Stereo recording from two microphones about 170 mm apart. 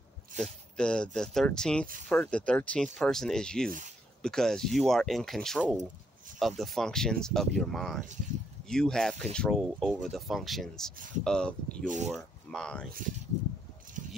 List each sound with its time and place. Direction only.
0.4 s speech: 5° left (ahead or behind)
11.0 s speech: 50° right (ahead or behind)
11.2 s speech: 5° left (ahead or behind)
11.8 s speech: 50° right (ahead or behind)
12.1 s speech: 5° left (ahead or behind)